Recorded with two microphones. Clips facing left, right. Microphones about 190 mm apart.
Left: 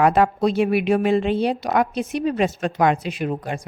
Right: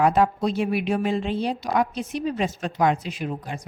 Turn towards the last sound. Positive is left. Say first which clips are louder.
# left 5 dB
turn(degrees=65)  # may be behind; listen again after turning